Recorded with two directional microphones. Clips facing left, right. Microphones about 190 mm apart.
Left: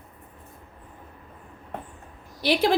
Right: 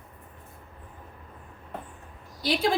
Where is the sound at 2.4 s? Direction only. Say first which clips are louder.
Left 4 dB; 70° left (ahead or behind).